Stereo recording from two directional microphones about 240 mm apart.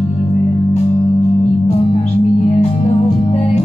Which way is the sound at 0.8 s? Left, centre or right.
Left.